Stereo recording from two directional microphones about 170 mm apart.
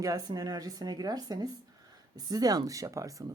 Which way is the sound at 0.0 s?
20° right (ahead or behind).